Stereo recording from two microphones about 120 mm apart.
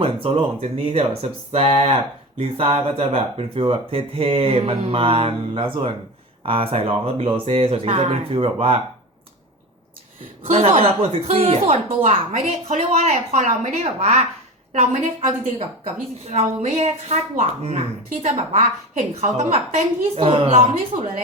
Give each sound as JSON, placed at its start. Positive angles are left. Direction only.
{"t": 0.0, "sound": "speech", "side_deg": -50}
{"t": 10.4, "sound": "speech", "side_deg": -55}
{"t": 12.7, "sound": "speech", "side_deg": -65}
{"t": 16.2, "sound": "speech", "side_deg": -65}
{"t": 20.9, "sound": "speech", "side_deg": -90}